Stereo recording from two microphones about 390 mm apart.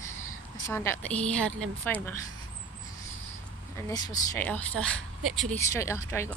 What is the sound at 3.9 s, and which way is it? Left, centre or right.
Speech, centre.